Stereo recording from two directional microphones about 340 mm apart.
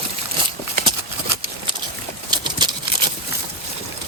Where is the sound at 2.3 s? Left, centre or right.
Centre.